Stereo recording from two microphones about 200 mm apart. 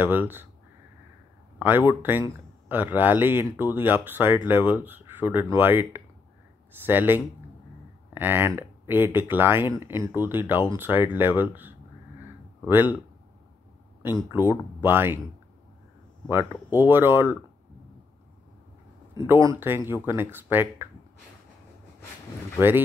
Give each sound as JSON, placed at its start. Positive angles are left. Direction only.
{"t": 0.0, "sound": "speech", "side_deg": -10}
{"t": 1.6, "sound": "speech", "side_deg": -10}
{"t": 14.0, "sound": "speech", "side_deg": -10}
{"t": 16.3, "sound": "speech", "side_deg": -10}
{"t": 19.4, "sound": "speech", "side_deg": -10}